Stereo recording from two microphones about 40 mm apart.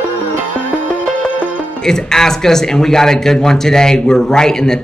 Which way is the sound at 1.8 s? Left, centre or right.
Centre.